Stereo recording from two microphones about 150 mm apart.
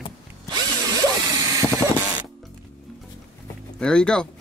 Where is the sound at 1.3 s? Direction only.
20° right (ahead or behind).